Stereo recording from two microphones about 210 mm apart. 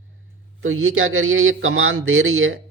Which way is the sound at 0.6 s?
85° right.